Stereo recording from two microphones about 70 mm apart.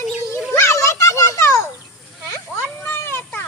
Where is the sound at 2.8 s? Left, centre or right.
Left.